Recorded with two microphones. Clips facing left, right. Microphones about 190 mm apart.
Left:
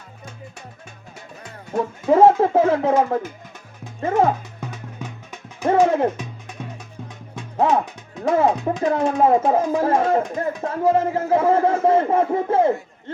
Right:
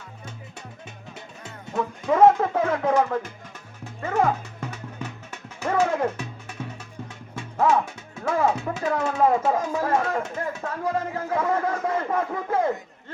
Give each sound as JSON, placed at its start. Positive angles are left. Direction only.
{"t": 1.7, "sound": "speech", "side_deg": 35}
{"t": 4.6, "sound": "music", "side_deg": 10}
{"t": 5.6, "sound": "speech", "side_deg": 30}
{"t": 7.7, "sound": "speech", "side_deg": 20}